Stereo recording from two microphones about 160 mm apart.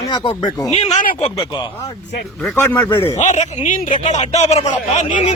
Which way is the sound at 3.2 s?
50° left (ahead or behind).